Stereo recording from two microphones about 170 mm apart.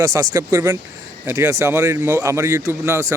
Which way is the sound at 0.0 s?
20° right (ahead or behind).